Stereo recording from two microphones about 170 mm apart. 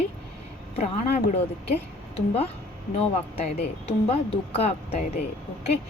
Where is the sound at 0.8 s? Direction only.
45° left (ahead or behind).